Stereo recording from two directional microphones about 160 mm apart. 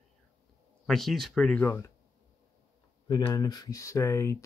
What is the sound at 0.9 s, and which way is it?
Speech, centre (ahead or behind).